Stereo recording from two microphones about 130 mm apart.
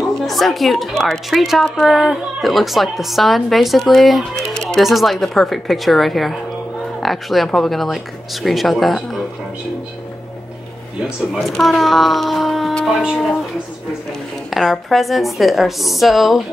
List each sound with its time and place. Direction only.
0.2 s a woman's voice: centre (ahead or behind)
11.3 s a woman's voice: centre (ahead or behind)
14.5 s a woman's voice: centre (ahead or behind)